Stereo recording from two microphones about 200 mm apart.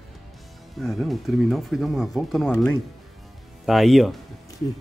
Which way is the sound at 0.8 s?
Centre (ahead or behind).